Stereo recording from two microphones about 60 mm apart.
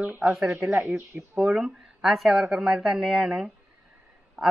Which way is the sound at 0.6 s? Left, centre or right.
Centre.